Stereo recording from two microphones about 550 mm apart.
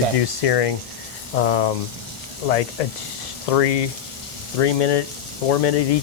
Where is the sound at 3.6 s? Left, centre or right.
Left.